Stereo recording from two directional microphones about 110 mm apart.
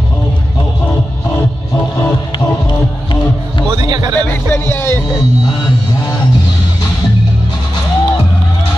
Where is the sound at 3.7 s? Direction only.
40° right (ahead or behind).